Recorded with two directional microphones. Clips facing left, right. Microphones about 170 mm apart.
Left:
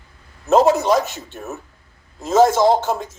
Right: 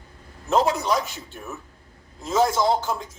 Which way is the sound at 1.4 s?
45° left (ahead or behind).